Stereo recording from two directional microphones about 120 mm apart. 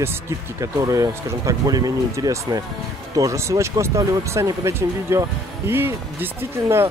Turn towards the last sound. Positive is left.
turn(degrees=-20)  # may be behind; listen again after turning